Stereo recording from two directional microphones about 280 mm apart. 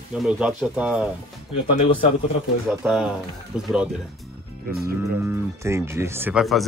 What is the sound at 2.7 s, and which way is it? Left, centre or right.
Speech, centre.